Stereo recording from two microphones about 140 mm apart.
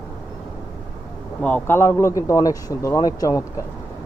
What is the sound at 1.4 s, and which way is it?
Speech, 10° left (ahead or behind).